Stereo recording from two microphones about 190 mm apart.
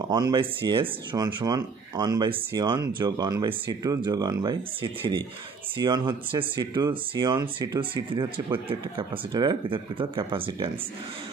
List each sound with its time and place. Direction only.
0.1 s speech: 20° right (ahead or behind)